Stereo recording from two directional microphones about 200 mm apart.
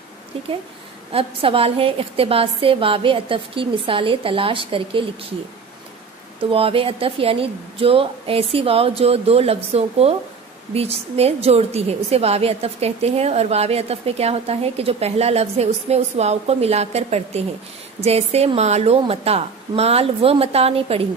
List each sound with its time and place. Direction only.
1.1 s a woman's voice: 30° right (ahead or behind)
6.5 s a woman's voice: 30° right (ahead or behind)